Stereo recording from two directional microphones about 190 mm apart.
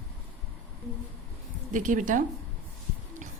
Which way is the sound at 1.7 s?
40° right (ahead or behind).